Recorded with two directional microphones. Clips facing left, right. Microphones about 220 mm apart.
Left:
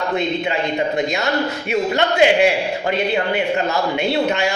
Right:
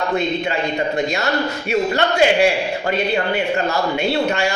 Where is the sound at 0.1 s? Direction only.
20° left (ahead or behind).